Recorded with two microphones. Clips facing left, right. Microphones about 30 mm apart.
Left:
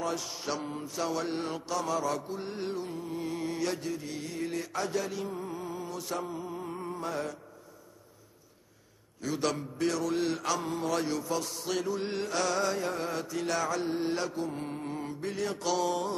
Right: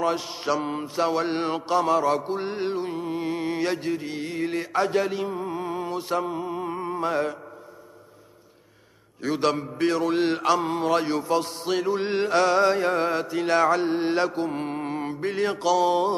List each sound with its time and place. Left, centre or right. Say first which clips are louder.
0.0 s mantra: right 8 dB; right
9.2 s mantra: right 7 dB; right